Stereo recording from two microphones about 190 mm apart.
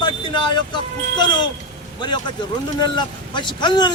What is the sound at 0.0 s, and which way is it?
Vehicle, 25° left (ahead or behind).